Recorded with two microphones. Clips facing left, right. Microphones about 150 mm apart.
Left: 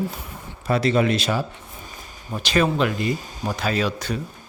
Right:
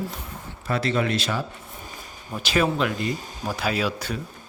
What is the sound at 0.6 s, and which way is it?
Speech, 15° left (ahead or behind).